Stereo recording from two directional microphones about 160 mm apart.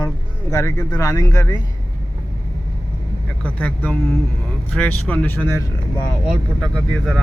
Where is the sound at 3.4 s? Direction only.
10° left (ahead or behind).